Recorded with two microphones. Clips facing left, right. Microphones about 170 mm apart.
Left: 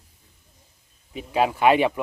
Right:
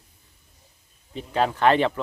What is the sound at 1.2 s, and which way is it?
Speech, 10° left (ahead or behind).